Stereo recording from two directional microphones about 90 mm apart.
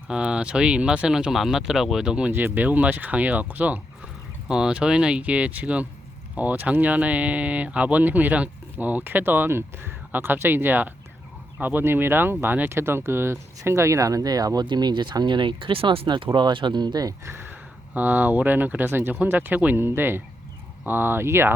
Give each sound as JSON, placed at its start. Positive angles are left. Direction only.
{"t": 0.1, "sound": "speech", "side_deg": -10}
{"t": 17.2, "sound": "speech", "side_deg": -25}